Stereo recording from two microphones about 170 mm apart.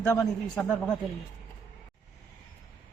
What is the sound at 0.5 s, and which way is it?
Speech, 5° left (ahead or behind).